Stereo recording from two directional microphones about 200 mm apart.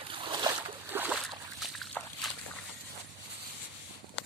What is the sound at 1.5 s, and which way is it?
Slosh, centre (ahead or behind).